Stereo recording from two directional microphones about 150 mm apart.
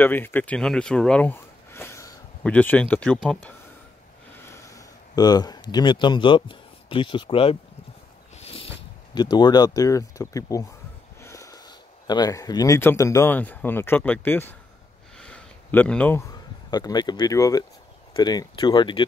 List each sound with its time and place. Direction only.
0.0 s speech: 15° left (ahead or behind)
4.5 s speech: 20° left (ahead or behind)
15.1 s a sound: 5° left (ahead or behind)
16.2 s speech: 25° left (ahead or behind)